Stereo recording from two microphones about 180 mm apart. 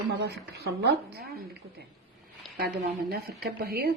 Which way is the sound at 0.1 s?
65° right (ahead or behind).